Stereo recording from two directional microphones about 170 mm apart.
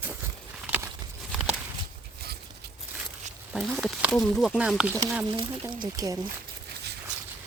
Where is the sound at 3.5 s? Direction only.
Centre (ahead or behind).